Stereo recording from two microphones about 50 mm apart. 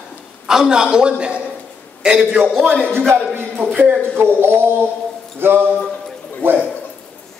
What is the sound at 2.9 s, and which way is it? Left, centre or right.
Speech, right.